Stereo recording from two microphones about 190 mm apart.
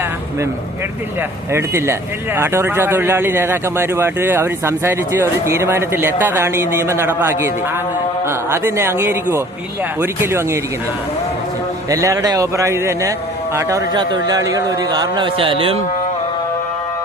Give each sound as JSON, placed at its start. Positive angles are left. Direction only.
{"t": 1.5, "sound": "speech", "side_deg": -15}
{"t": 11.9, "sound": "a man's voice", "side_deg": -15}